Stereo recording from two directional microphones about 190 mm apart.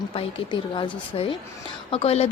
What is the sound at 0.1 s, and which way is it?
Speech, 30° left (ahead or behind).